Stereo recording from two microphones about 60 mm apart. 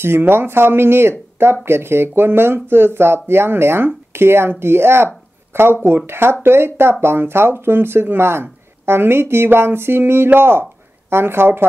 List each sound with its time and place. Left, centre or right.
0.0 s speech: right